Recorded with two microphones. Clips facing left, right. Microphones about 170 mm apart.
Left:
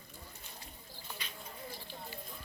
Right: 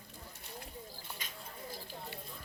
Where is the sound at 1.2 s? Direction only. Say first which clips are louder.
Left 1 dB; 45° right (ahead or behind).